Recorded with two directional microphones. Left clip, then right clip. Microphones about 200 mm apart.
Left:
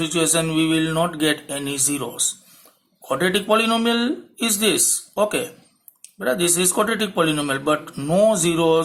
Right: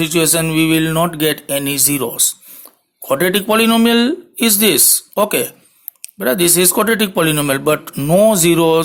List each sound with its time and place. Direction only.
0.0 s speech: 45° right (ahead or behind)